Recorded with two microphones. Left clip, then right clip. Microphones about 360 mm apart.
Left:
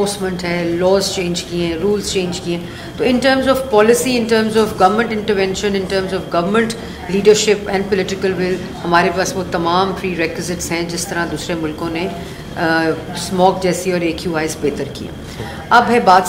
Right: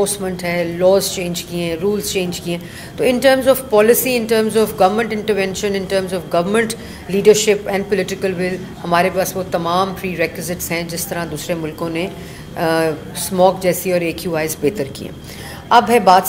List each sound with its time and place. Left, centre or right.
0.0 s speech: right